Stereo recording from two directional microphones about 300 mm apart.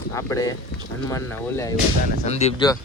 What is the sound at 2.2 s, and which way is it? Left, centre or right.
Speech, left.